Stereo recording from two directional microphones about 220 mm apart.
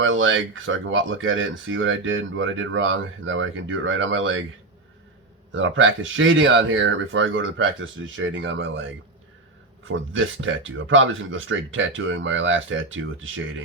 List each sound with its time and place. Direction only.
0.0 s speech: 60° right (ahead or behind)
5.5 s speech: 60° right (ahead or behind)